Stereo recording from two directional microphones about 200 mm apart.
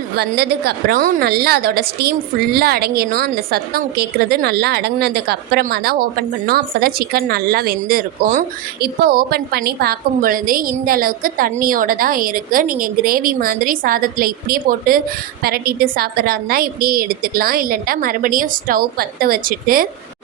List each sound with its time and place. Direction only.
0.2 s a woman's voice: 55° right (ahead or behind)